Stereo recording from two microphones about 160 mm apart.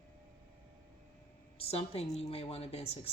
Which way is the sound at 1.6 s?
40° left (ahead or behind).